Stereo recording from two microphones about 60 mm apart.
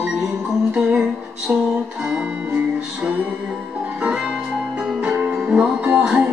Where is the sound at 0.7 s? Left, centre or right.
Centre.